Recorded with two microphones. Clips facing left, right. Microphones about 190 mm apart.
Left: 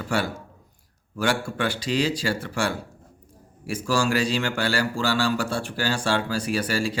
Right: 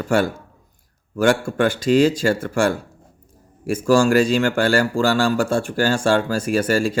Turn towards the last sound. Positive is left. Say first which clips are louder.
# right 6 dB
turn(degrees=-45)  # may be behind; listen again after turning